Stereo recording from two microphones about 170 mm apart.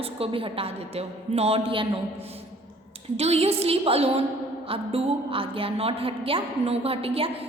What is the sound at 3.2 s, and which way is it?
A woman's voice, 40° right (ahead or behind).